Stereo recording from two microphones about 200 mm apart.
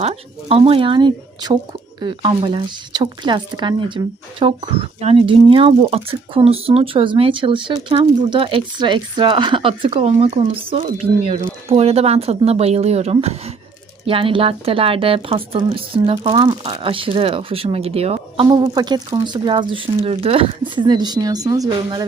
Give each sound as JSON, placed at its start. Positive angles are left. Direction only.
{"t": 0.0, "sound": "a woman's voice", "side_deg": -30}